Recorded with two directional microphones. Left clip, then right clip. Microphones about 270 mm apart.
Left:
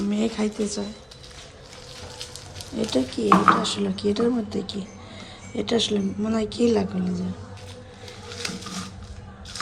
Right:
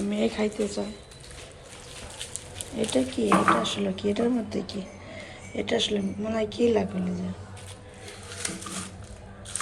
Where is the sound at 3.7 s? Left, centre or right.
Left.